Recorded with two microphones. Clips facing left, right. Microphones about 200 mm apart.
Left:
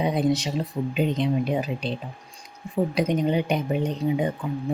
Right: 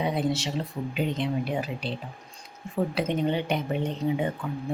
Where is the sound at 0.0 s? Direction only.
15° left (ahead or behind).